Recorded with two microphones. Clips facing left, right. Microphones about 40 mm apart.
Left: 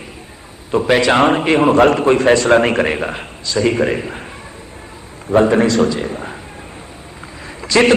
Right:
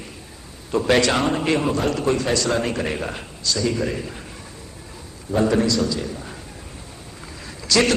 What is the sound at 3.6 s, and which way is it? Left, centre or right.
Speech, left.